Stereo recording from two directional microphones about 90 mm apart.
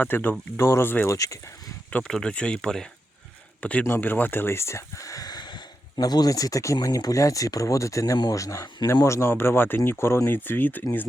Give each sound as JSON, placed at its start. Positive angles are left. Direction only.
{"t": 0.0, "sound": "speech", "side_deg": 20}
{"t": 1.1, "sound": "speech", "side_deg": 40}
{"t": 2.0, "sound": "speech", "side_deg": 5}
{"t": 9.0, "sound": "speech", "side_deg": 30}